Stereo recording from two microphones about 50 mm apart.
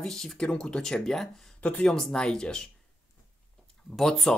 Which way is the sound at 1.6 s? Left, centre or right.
Left.